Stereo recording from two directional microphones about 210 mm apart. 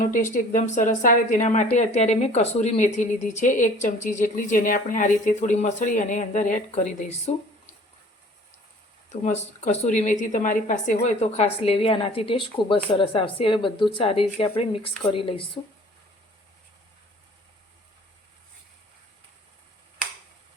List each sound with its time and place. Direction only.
0.1 s speech: 35° left (ahead or behind)
9.0 s a woman's voice: 35° left (ahead or behind)